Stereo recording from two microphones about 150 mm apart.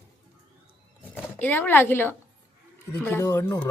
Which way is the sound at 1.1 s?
10° left (ahead or behind).